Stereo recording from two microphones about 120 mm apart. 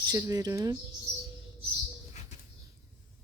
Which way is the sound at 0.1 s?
30° right (ahead or behind).